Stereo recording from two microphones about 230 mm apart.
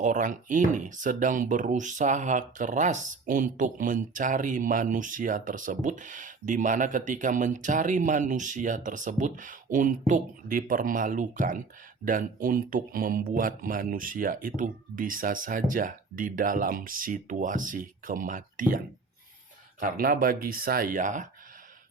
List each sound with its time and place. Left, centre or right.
0.0 s speech: right
19.8 s speech: right